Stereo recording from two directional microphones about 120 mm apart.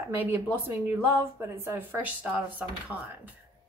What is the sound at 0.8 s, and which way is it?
A woman's voice, 15° right (ahead or behind).